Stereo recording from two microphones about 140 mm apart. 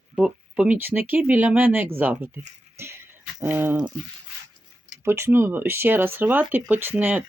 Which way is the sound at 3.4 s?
15° right (ahead or behind).